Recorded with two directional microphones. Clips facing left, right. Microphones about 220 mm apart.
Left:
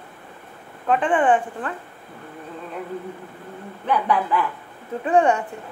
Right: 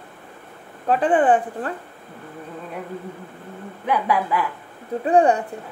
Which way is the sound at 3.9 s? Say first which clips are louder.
Even; 10° right (ahead or behind).